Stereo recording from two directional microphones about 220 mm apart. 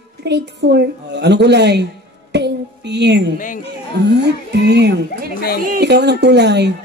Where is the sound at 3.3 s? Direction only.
35° left (ahead or behind).